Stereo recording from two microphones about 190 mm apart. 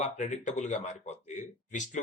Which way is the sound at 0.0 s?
40° left (ahead or behind).